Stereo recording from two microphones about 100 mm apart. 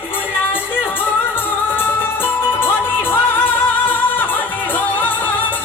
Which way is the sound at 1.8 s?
20° left (ahead or behind).